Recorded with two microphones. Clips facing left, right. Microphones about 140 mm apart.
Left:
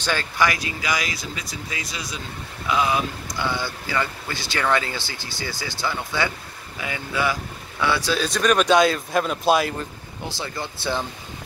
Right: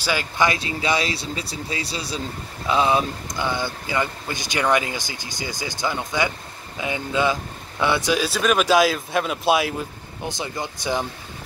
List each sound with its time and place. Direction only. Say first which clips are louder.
0.0 s speech: right 1 dB; 10° right (ahead or behind)
0.4 s speech: right 2 dB; 25° right (ahead or behind)
3.4 s speech: right 1 dB; 20° right (ahead or behind); by 9.8 s centre (ahead or behind)
10.2 s speech: right 2 dB; 20° right (ahead or behind)